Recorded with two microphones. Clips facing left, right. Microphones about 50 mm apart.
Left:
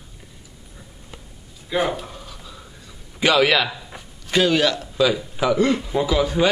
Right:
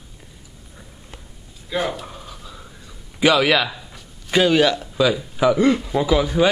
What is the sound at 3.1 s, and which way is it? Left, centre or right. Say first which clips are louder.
A man's voice: right 1 dB; centre.